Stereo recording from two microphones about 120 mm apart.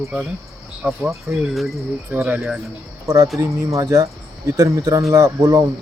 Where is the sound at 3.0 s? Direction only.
30° right (ahead or behind).